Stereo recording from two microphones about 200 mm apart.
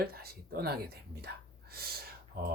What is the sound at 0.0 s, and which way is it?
Speech, 50° right (ahead or behind).